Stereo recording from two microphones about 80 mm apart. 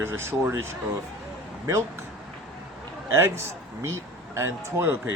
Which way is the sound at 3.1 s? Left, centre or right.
Right.